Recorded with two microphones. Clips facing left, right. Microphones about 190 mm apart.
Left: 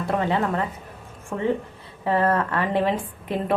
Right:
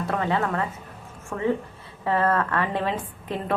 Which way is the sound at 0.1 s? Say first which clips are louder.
Left 3 dB; 20° left (ahead or behind).